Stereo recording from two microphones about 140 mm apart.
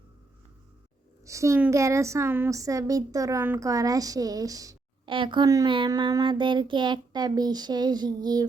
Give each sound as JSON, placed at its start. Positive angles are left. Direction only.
{"t": 1.2, "sound": "a woman's voice", "side_deg": -20}
{"t": 5.0, "sound": "speech", "side_deg": -35}